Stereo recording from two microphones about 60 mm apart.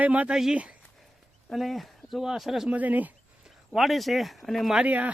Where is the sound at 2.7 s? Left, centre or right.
Right.